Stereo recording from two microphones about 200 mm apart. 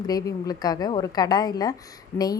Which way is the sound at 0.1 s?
20° left (ahead or behind).